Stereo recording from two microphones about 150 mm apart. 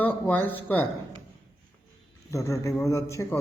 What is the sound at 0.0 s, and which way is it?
Speech, 10° left (ahead or behind).